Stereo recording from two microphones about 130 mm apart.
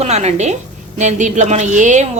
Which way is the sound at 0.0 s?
60° right (ahead or behind).